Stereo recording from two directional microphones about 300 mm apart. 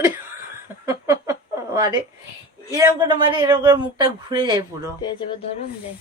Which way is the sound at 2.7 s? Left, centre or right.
Centre.